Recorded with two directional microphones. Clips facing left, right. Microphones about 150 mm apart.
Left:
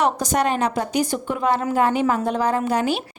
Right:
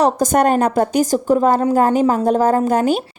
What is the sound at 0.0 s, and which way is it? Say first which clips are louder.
A woman's voice: right 6 dB; 50° right (ahead or behind).